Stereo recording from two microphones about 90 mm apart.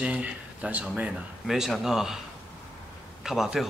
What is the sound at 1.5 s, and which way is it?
Speech, 5° right (ahead or behind).